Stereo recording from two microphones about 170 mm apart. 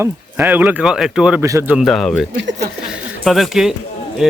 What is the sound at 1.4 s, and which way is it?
Speech, 15° right (ahead or behind).